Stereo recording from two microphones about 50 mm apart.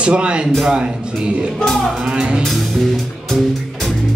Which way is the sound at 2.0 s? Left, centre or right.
Centre.